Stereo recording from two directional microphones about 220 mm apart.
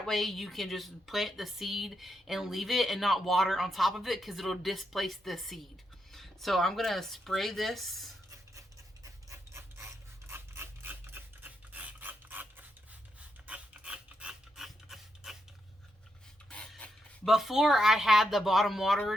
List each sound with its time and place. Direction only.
0.0 s speech: centre (ahead or behind)
9.5 s scissors: 10° right (ahead or behind)
13.5 s mechanisms: 5° right (ahead or behind)
16.5 s speech: 5° left (ahead or behind)